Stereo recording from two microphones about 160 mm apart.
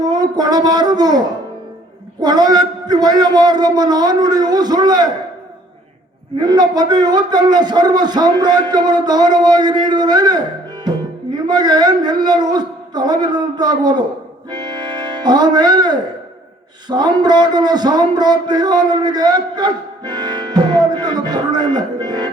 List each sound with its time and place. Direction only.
0.0 s speech: 25° right (ahead or behind)
2.2 s a man's voice: 25° right (ahead or behind)
6.4 s a man's voice: 25° right (ahead or behind)
11.4 s a man's voice: 25° right (ahead or behind)
14.5 s music: 25° right (ahead or behind)
16.9 s a man's voice: 25° right (ahead or behind)